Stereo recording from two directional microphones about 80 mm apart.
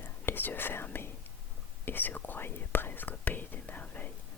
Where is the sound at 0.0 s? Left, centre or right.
Left.